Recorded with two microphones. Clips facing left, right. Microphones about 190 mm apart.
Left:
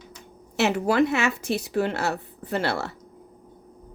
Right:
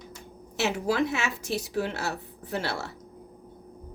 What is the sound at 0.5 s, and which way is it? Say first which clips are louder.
A woman's voice: left 5 dB; 60° left (ahead or behind).